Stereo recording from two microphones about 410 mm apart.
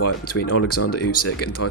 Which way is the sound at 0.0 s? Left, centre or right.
Left.